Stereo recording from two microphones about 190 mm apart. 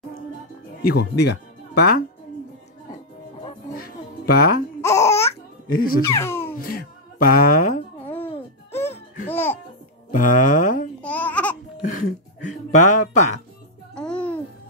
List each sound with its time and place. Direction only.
0.8 s speech: 60° left (ahead or behind)
3.7 s music: 50° left (ahead or behind)
4.8 s laughter: 15° left (ahead or behind)
5.8 s speech: 50° left (ahead or behind)
6.0 s babbling: 15° left (ahead or behind)
6.6 s speech: 50° left (ahead or behind)
9.3 s music: 10° left (ahead or behind)
10.1 s music: 45° left (ahead or behind)
11.0 s babbling: 10° left (ahead or behind)
11.8 s a sound: 45° left (ahead or behind)
13.9 s music: 5° left (ahead or behind)